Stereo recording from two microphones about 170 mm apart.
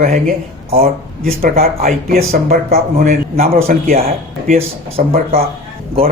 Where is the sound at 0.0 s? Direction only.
55° right (ahead or behind).